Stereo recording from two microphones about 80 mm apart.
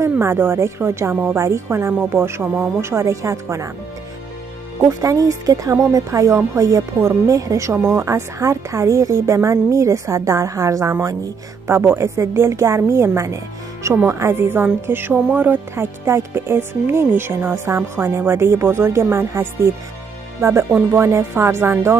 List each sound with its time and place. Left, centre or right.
0.2 s speech: right
5.0 s speech: right
11.6 s speech: right
20.9 s speech: right